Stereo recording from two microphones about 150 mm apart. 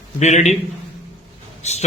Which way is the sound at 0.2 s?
50° left (ahead or behind).